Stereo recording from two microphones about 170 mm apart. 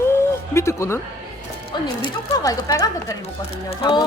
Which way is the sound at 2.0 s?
20° left (ahead or behind).